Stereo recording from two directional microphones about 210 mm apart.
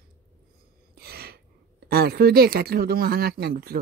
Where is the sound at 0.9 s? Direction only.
45° right (ahead or behind).